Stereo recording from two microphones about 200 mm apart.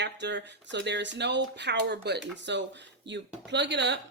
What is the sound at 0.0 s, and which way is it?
Speech, 60° right (ahead or behind).